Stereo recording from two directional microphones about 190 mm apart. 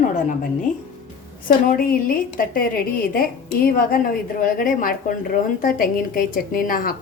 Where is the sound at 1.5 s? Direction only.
50° left (ahead or behind).